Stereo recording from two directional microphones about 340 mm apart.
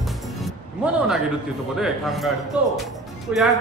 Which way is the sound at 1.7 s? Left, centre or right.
Centre.